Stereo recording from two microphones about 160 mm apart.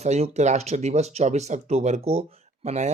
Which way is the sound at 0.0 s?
45° right (ahead or behind).